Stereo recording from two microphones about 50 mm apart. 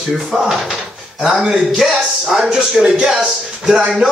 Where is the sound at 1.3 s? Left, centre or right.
Centre.